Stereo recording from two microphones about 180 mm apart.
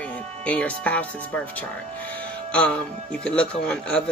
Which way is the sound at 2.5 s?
5° left (ahead or behind).